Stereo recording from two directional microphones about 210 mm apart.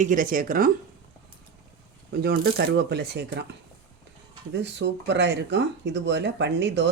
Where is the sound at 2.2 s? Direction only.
45° right (ahead or behind).